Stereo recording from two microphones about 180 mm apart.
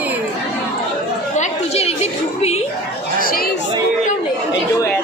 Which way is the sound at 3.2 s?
55° left (ahead or behind).